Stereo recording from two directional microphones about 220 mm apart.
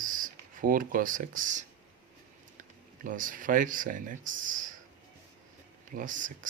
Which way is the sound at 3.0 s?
40° right (ahead or behind).